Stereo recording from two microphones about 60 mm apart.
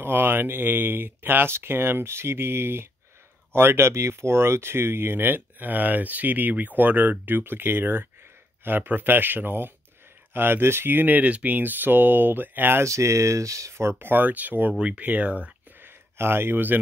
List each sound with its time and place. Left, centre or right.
0.0 s speech: right
12.8 s speech: right
14.7 s speech: centre
15.8 s speech: right